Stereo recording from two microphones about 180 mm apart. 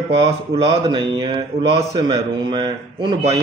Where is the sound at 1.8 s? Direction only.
15° right (ahead or behind).